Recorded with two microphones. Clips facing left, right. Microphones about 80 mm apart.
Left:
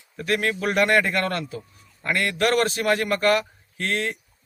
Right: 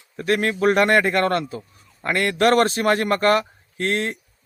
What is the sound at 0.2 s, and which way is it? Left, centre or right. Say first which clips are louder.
A man's voice: right 4 dB; right.